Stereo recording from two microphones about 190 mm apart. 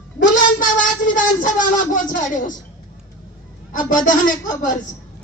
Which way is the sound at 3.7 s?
45° left (ahead or behind).